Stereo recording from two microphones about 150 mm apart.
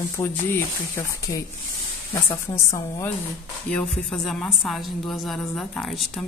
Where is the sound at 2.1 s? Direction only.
35° left (ahead or behind).